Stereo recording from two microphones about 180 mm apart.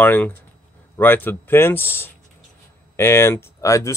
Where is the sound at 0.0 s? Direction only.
10° left (ahead or behind).